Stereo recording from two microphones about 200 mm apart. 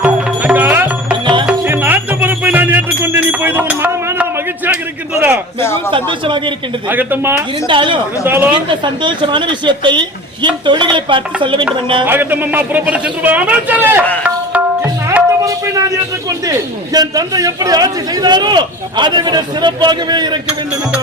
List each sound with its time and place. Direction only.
0.0 s music: 5° right (ahead or behind)
1.1 s music: 25° right (ahead or behind)
1.5 s music: 10° right (ahead or behind)
5.5 s speech: 10° left (ahead or behind)
5.9 s a man's voice: 25° right (ahead or behind)
6.8 s a man's voice: 10° right (ahead or behind)
7.7 s a man's voice: 25° right (ahead or behind)
8.2 s a man's voice: 10° right (ahead or behind)
8.8 s a man's voice: 25° right (ahead or behind)
12.0 s a man's voice: 10° right (ahead or behind)
14.3 s music: 10° right (ahead or behind)
16.5 s a man's voice: 20° right (ahead or behind)